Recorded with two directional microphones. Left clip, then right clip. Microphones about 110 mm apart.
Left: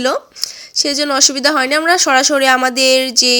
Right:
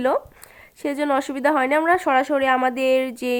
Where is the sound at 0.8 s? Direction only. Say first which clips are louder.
Left 8 dB; 25° left (ahead or behind).